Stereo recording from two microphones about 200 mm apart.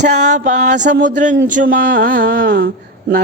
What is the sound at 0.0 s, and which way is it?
Music, 40° right (ahead or behind).